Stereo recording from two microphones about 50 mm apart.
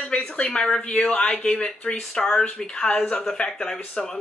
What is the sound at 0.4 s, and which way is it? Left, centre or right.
Speech, centre.